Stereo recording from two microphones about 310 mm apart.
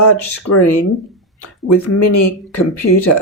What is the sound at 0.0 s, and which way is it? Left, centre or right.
Speech, left.